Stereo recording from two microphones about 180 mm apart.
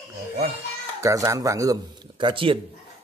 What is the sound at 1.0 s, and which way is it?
Speech, 15° right (ahead or behind).